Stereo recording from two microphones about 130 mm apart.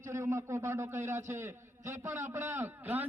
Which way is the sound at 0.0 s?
20° right (ahead or behind).